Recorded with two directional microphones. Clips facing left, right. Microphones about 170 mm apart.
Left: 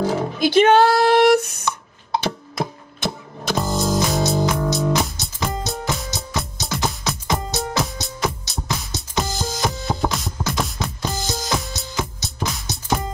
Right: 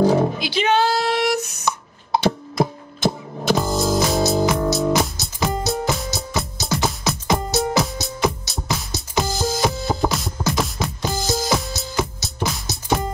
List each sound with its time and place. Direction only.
0.0 s roar: 15° right (ahead or behind)
0.4 s a sound: 50° left (ahead or behind)
3.4 s music: centre (ahead or behind)